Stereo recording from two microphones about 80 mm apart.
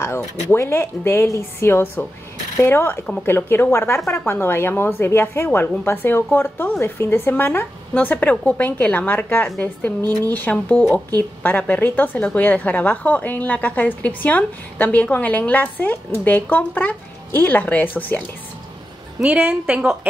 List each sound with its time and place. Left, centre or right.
0.5 s a woman's voice: left
19.2 s speech: right